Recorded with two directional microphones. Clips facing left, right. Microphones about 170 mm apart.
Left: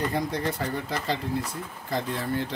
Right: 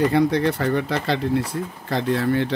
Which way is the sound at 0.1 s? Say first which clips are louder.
Right 9 dB; 75° right (ahead or behind).